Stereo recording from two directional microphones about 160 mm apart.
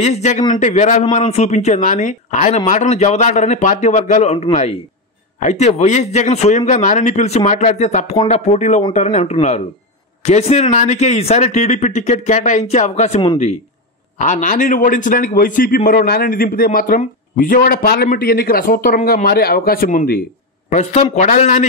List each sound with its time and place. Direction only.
0.0 s speech: 45° left (ahead or behind)
14.1 s speech: 55° left (ahead or behind)
20.7 s speech: 45° left (ahead or behind)